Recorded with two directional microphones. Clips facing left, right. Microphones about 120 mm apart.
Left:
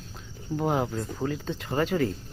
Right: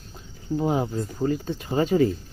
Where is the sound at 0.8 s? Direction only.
5° right (ahead or behind).